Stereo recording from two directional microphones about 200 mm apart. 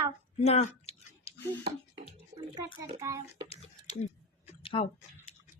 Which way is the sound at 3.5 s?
30° left (ahead or behind).